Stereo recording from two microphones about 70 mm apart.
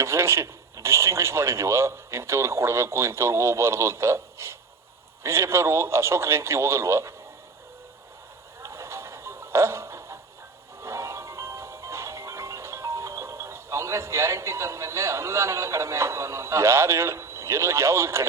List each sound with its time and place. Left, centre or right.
0.0 s speech: right
8.6 s a sound: right
10.8 s music: right